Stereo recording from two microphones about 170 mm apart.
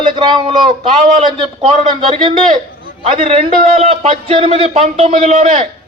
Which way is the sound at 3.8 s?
35° right (ahead or behind).